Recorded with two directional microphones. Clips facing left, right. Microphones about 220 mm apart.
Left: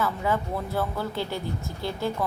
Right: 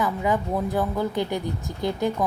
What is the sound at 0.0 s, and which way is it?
A woman's voice, 15° right (ahead or behind).